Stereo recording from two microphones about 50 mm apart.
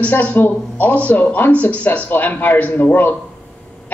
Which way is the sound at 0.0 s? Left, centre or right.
Left.